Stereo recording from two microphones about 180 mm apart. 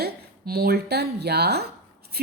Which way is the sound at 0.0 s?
60° right (ahead or behind).